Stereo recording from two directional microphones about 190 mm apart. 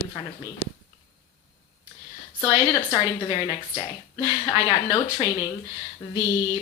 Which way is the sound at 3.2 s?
25° left (ahead or behind).